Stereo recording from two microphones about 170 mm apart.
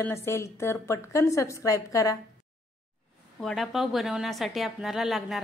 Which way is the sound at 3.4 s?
Centre (ahead or behind).